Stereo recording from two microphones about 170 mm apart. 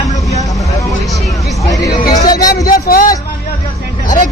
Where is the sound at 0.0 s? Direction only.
20° left (ahead or behind).